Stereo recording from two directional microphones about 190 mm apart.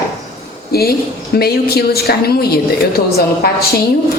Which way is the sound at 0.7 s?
55° left (ahead or behind).